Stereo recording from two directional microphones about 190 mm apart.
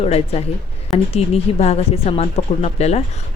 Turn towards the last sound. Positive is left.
turn(degrees=35)  # may be behind; listen again after turning